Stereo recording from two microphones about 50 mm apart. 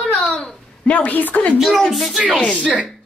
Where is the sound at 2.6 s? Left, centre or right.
Right.